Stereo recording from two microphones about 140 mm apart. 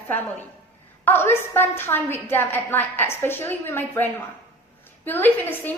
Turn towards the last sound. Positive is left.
turn(degrees=15)  # may be behind; listen again after turning